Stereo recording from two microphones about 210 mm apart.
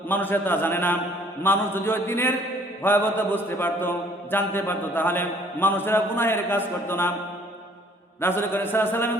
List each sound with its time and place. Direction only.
0.1 s mantra: 10° left (ahead or behind)
8.2 s mantra: 10° left (ahead or behind)